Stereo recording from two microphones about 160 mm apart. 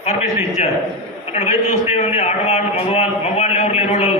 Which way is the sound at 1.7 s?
45° left (ahead or behind).